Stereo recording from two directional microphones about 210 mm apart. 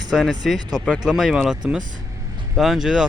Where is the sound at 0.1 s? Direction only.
Centre (ahead or behind).